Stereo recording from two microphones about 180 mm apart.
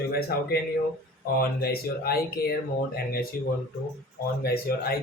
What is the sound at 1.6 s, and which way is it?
Speech, 60° left (ahead or behind).